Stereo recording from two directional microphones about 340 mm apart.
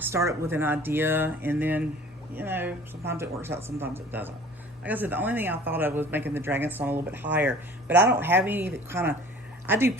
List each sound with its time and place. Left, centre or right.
0.0 s a man's voice: centre
7.9 s speech: right
8.2 s a man's voice: centre